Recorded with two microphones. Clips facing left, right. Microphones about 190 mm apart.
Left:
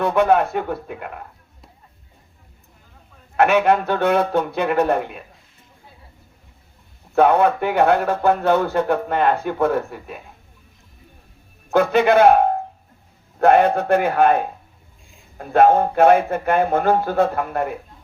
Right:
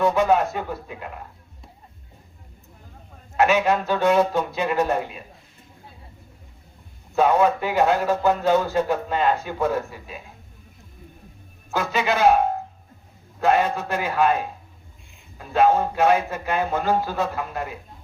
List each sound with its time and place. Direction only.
0.0 s a man's voice: 60° left (ahead or behind)
3.3 s a man's voice: 60° left (ahead or behind)
7.2 s a man's voice: 60° left (ahead or behind)
11.7 s a man's voice: 55° left (ahead or behind)